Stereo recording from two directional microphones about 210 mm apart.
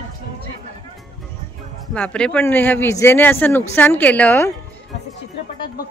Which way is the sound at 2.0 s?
5° left (ahead or behind).